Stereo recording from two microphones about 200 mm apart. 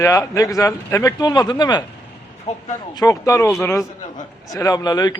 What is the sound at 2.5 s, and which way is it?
Speech, 35° left (ahead or behind).